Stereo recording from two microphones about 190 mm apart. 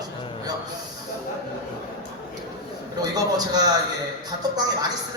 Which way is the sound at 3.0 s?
20° right (ahead or behind).